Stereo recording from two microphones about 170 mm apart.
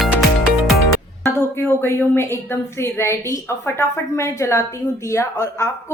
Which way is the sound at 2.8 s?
15° left (ahead or behind).